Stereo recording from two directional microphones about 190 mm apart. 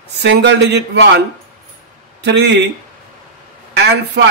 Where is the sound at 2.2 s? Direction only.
65° right (ahead or behind).